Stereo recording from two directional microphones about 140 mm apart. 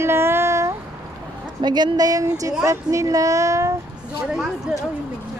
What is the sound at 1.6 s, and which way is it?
Speech, 30° right (ahead or behind).